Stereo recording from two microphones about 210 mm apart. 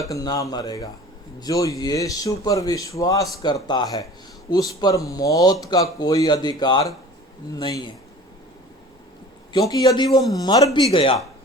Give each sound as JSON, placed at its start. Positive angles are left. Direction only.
{"t": 0.0, "sound": "speech", "side_deg": 15}
{"t": 9.5, "sound": "a man's voice", "side_deg": 20}